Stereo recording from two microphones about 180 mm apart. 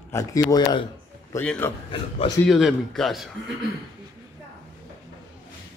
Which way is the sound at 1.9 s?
30° left (ahead or behind).